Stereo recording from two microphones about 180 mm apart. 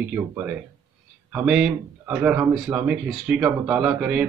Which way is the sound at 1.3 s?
5° right (ahead or behind).